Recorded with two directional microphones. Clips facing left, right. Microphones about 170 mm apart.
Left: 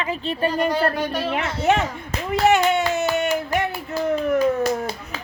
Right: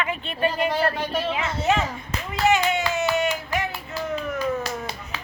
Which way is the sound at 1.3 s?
60° left (ahead or behind).